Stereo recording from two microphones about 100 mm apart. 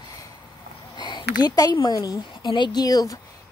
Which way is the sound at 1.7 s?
45° left (ahead or behind).